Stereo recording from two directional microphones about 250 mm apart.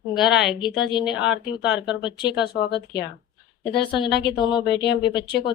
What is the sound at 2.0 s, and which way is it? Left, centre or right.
Speech, centre.